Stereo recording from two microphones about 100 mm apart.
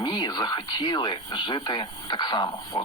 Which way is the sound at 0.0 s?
45° left (ahead or behind).